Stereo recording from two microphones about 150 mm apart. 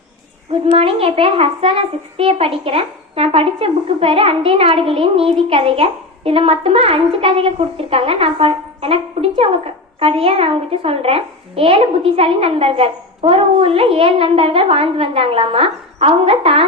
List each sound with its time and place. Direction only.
0.6 s speech: 40° right (ahead or behind)